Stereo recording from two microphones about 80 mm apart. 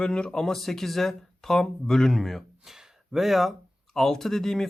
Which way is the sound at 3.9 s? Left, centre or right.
Centre.